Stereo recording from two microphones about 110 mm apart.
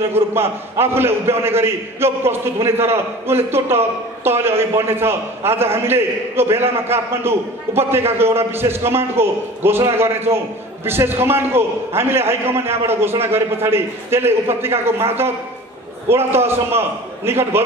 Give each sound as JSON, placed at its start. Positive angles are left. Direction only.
{"t": 0.1, "sound": "a man's voice", "side_deg": -20}